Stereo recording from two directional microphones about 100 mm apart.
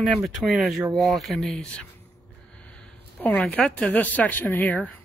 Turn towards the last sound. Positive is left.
turn(degrees=15)  # may be behind; listen again after turning